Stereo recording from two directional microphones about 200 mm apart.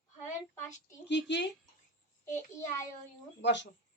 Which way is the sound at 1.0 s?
60° left (ahead or behind).